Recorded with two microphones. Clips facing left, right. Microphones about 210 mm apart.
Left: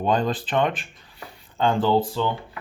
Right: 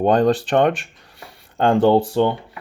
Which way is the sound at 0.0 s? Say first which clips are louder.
Right 7 dB; 60° right (ahead or behind).